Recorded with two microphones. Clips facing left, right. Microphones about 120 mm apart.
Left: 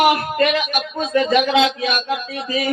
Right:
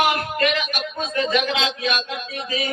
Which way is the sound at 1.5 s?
45° left (ahead or behind).